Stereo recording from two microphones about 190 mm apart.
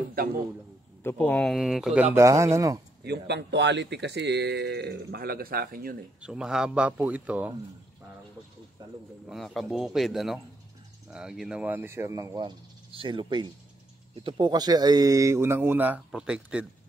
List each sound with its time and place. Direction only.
1.0 s a man's voice: 10° left (ahead or behind)
2.1 s speech: 15° right (ahead or behind)
3.0 s speech: 60° right (ahead or behind)
6.2 s speech: 5° right (ahead or behind)
9.3 s a man's voice: centre (ahead or behind)